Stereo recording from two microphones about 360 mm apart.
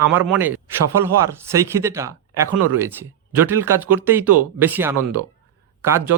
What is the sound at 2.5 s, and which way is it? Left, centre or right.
Speech, right.